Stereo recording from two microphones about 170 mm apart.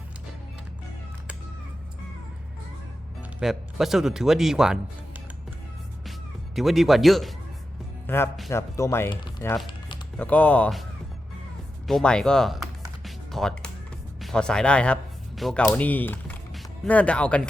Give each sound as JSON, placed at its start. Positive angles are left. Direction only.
{"t": 3.4, "sound": "speech", "side_deg": 0}
{"t": 6.6, "sound": "speech", "side_deg": 0}
{"t": 8.0, "sound": "speech", "side_deg": 15}
{"t": 11.9, "sound": "speech", "side_deg": 5}
{"t": 13.1, "sound": "music", "side_deg": 0}
{"t": 14.2, "sound": "speech", "side_deg": 5}